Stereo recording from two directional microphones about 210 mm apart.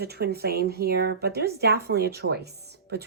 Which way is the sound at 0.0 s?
50° right (ahead or behind).